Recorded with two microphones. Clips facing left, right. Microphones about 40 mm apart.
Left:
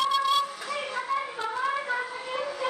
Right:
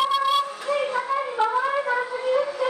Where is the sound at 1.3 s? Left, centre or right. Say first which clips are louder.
Right 10 dB; right.